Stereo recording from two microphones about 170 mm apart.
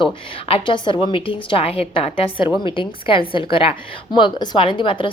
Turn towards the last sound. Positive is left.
turn(degrees=30)  # may be behind; listen again after turning